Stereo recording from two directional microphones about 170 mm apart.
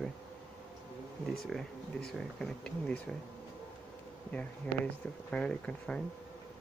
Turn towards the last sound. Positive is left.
turn(degrees=5)  # may be behind; listen again after turning